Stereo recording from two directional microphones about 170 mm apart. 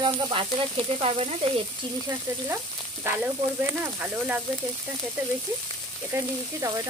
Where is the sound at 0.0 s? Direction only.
30° right (ahead or behind).